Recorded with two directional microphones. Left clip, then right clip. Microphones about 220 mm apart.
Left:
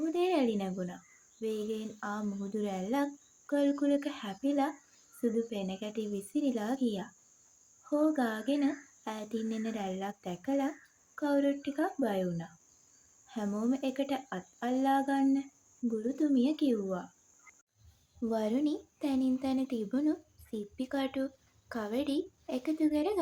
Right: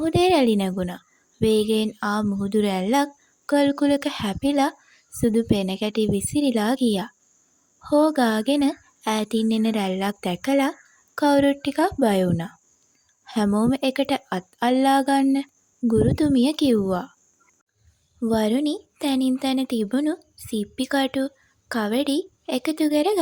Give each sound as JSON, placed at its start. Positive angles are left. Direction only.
{"t": 0.0, "sound": "a woman's voice", "side_deg": -45}
{"t": 18.2, "sound": "speech", "side_deg": -40}